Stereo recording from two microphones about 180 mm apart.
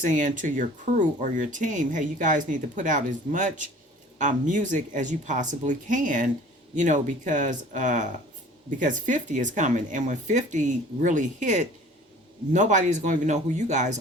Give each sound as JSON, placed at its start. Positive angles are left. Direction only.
{"t": 0.0, "sound": "speech", "side_deg": -45}